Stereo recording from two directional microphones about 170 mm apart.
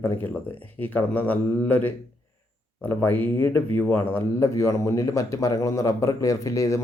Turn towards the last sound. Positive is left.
turn(degrees=20)  # may be behind; listen again after turning